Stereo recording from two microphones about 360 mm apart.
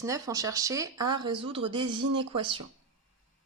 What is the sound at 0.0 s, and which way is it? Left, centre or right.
Speech, centre.